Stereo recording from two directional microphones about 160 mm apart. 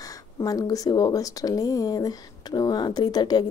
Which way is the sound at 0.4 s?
25° left (ahead or behind).